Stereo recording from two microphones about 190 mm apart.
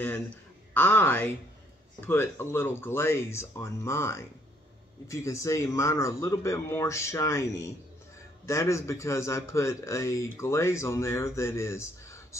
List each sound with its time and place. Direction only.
0.7 s a man's voice: 10° left (ahead or behind)